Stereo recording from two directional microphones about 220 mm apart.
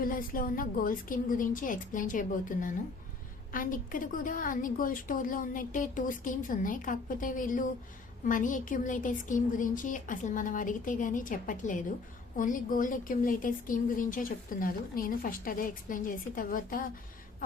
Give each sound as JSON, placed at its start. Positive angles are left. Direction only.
{"t": 0.0, "sound": "speech", "side_deg": 40}